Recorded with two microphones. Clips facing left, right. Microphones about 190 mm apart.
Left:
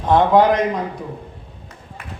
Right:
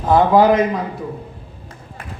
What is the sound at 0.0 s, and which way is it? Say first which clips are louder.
Speech: right 1 dB; 5° right (ahead or behind).